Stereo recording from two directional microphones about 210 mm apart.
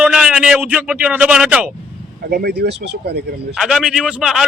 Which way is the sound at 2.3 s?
50° right (ahead or behind).